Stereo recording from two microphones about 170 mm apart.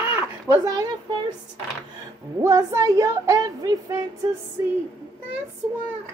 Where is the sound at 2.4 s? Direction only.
15° right (ahead or behind).